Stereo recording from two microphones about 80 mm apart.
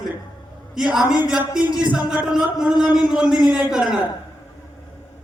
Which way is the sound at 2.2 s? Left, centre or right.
Centre.